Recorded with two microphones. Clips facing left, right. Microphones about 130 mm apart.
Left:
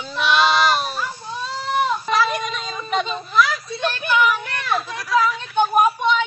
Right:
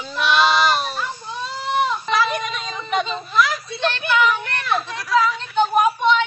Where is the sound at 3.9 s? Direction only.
5° left (ahead or behind).